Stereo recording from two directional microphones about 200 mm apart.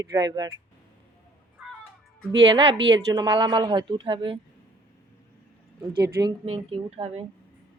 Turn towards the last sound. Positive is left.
turn(degrees=-30)  # may be behind; listen again after turning